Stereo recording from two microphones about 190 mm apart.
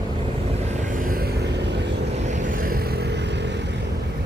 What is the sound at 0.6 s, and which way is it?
Vehicle, 45° right (ahead or behind).